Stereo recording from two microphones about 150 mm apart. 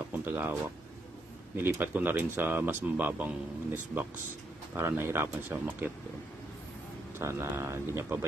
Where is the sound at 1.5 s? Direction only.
15° right (ahead or behind).